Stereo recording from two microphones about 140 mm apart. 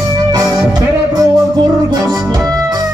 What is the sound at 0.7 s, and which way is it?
Music, 30° right (ahead or behind).